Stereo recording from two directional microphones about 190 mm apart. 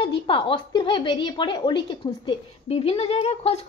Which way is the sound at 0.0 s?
25° left (ahead or behind).